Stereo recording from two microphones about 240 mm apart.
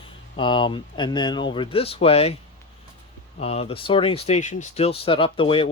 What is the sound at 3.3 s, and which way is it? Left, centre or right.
Speech, left.